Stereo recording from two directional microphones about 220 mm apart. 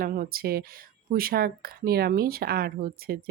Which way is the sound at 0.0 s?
40° right (ahead or behind).